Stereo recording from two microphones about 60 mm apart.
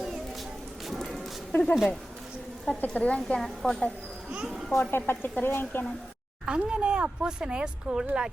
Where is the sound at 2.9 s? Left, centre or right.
Centre.